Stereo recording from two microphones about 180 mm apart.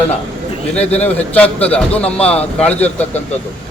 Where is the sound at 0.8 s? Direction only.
10° left (ahead or behind).